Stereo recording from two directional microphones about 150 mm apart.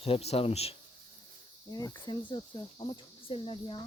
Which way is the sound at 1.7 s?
30° left (ahead or behind).